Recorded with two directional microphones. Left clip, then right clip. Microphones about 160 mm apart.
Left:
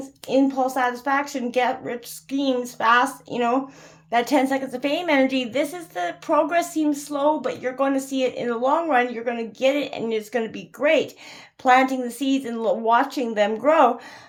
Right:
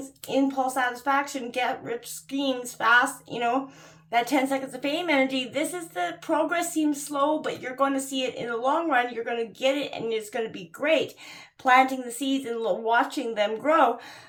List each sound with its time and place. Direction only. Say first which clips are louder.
0.3 s a woman's voice: left 4 dB; 40° left (ahead or behind)